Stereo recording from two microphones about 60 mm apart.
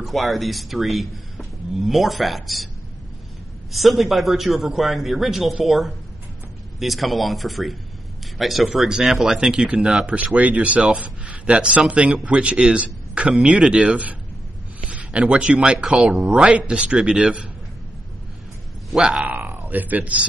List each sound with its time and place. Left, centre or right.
0.0 s speech: centre
3.7 s a man's voice: centre
10.0 s a man's voice: right
14.9 s a man's voice: right
18.9 s a man's voice: centre
19.2 s speech: right